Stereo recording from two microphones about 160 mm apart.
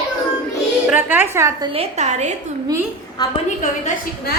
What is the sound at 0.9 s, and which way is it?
Speech, 10° right (ahead or behind).